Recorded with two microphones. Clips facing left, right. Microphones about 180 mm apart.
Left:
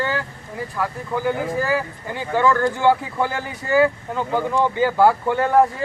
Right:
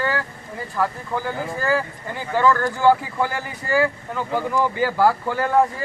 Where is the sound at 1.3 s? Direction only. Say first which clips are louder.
Left 2 dB; 15° left (ahead or behind).